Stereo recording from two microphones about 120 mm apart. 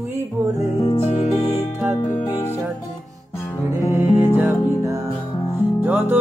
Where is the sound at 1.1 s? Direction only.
65° left (ahead or behind).